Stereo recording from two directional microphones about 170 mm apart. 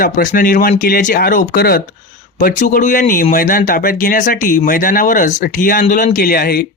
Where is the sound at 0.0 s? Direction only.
50° left (ahead or behind).